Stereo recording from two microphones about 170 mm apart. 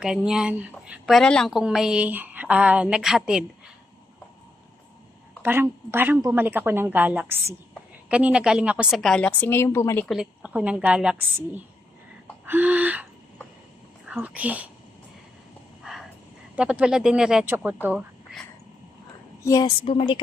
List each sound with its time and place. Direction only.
0.0 s a woman's voice: 5° right (ahead or behind)
5.4 s a woman's voice: 10° right (ahead or behind); by 10.1 s 15° left (ahead or behind)
10.1 s a woman's voice: 5° right (ahead or behind)
14.1 s a woman's voice: 10° right (ahead or behind)
15.8 s a sound: centre (ahead or behind)
16.6 s a woman's voice: 5° right (ahead or behind)
19.5 s a woman's voice: 20° left (ahead or behind)
19.8 s a woman's voice: 30° left (ahead or behind)